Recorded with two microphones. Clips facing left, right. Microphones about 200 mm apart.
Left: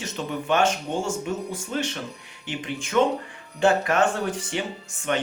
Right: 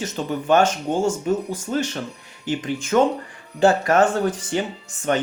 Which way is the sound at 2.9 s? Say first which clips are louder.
Right 3 dB; 45° right (ahead or behind).